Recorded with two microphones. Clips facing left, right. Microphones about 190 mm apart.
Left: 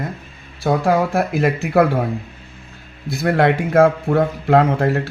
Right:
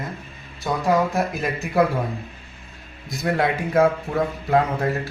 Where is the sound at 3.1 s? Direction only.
70° left (ahead or behind).